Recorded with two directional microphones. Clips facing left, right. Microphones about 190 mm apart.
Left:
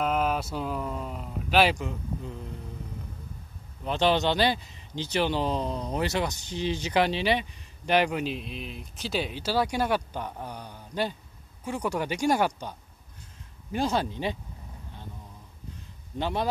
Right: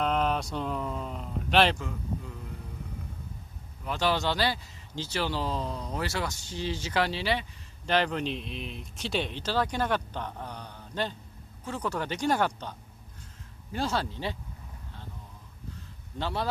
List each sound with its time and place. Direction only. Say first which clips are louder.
0.0 s speech: left 1 dB; 5° left (ahead or behind)
1.8 s a man's voice: left 2 dB; 20° left (ahead or behind)
3.8 s speech: left 4 dB; 20° left (ahead or behind)
16.2 s speech: left 3 dB; 15° left (ahead or behind)